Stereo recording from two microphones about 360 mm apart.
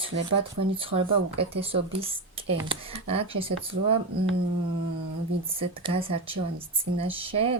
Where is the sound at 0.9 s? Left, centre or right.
Centre.